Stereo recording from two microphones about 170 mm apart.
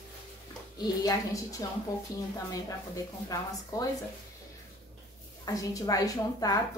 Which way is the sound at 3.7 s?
20° left (ahead or behind).